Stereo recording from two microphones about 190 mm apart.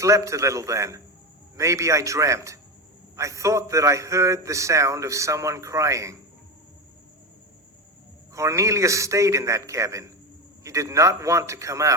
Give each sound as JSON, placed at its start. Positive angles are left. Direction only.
{"t": 0.0, "sound": "a man's voice", "side_deg": -15}
{"t": 8.3, "sound": "a man's voice", "side_deg": -15}